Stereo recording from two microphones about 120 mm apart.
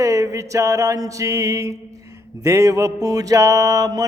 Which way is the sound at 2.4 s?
25° right (ahead or behind).